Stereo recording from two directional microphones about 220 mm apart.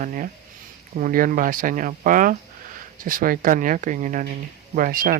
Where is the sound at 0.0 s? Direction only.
35° right (ahead or behind).